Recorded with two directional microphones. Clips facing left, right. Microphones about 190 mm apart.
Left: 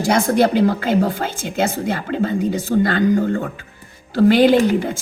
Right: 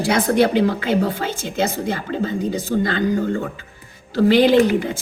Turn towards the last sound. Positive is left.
turn(degrees=55)  # may be behind; listen again after turning